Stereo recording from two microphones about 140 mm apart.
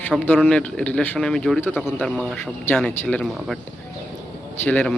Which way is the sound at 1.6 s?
15° left (ahead or behind).